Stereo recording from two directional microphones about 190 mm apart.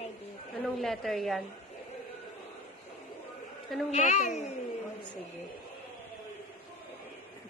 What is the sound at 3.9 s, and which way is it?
Speech, 35° left (ahead or behind).